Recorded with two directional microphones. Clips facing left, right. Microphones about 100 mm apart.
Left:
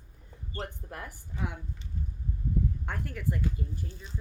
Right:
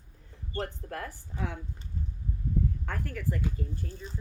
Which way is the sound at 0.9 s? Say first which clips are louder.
Right 3 dB; 15° left (ahead or behind).